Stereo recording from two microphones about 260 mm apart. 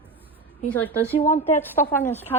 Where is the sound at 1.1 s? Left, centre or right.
Left.